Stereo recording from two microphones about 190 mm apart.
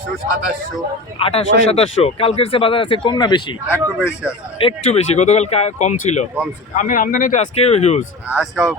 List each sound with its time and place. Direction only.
1.2 s speech: 30° left (ahead or behind)
4.6 s speech: 35° left (ahead or behind)
8.3 s speech: 5° right (ahead or behind)